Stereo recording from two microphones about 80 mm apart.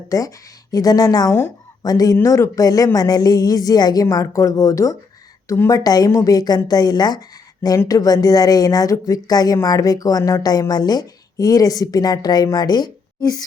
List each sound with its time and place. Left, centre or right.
0.1 s a woman's voice: left